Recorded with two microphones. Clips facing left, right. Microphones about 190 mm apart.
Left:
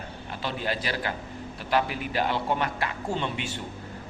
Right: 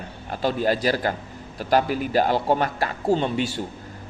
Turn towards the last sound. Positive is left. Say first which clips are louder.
# right 8 dB
turn(degrees=-35)  # may be behind; listen again after turning